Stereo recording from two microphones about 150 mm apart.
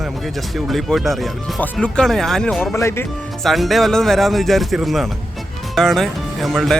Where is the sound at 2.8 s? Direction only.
20° left (ahead or behind).